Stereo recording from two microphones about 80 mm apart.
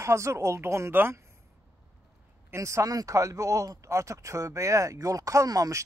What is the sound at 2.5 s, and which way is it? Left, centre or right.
A man's voice, right.